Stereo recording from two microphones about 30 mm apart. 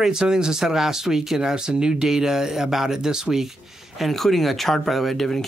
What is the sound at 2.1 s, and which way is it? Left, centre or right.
Speech, centre.